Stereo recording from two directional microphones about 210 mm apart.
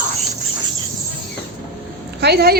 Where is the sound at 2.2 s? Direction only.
50° right (ahead or behind).